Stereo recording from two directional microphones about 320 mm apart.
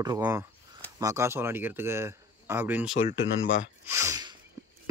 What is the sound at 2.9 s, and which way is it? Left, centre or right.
Speech, left.